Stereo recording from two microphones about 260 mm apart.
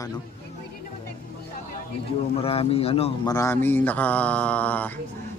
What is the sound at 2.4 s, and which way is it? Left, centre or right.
A man's voice, left.